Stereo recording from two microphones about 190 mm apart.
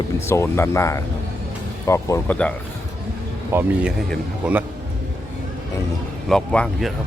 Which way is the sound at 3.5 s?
10° right (ahead or behind).